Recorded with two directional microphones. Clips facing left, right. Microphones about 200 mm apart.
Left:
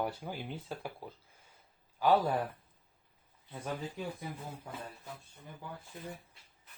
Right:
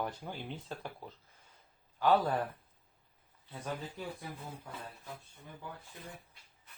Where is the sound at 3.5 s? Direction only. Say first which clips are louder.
Left 2 dB; 10° left (ahead or behind).